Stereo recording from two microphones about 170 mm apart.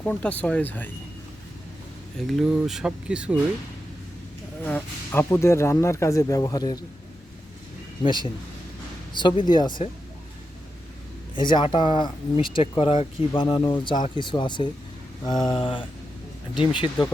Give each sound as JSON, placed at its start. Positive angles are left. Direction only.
{"t": 0.0, "sound": "speech", "side_deg": 10}
{"t": 2.2, "sound": "speech", "side_deg": 0}
{"t": 4.6, "sound": "speech", "side_deg": 10}
{"t": 8.0, "sound": "speech", "side_deg": 25}
{"t": 11.3, "sound": "speech", "side_deg": 25}